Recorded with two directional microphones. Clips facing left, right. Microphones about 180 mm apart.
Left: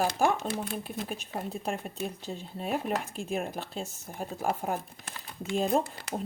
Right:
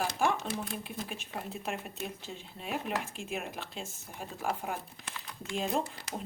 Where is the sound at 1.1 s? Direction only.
40° left (ahead or behind).